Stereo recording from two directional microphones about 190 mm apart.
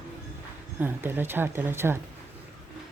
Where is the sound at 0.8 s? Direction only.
10° right (ahead or behind).